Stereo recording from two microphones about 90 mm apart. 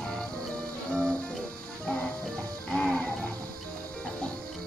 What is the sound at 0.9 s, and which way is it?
Music, 10° left (ahead or behind).